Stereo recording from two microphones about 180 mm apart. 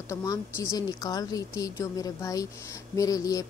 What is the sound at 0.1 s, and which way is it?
A woman's voice, 15° left (ahead or behind).